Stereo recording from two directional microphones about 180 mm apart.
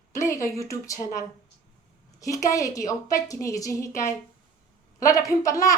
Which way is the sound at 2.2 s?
20° left (ahead or behind).